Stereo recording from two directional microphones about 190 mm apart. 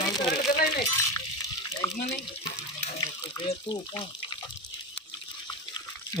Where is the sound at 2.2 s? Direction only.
25° left (ahead or behind).